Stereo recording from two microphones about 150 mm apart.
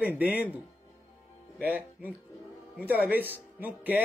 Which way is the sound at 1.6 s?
10° right (ahead or behind).